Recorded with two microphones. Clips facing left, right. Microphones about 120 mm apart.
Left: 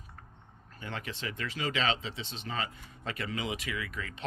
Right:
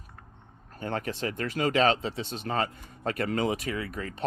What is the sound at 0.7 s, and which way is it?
Speech, 45° right (ahead or behind).